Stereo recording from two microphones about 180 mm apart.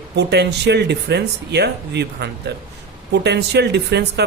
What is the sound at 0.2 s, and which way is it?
Speech, 70° right (ahead or behind).